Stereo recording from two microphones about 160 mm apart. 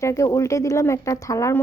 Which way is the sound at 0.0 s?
20° left (ahead or behind).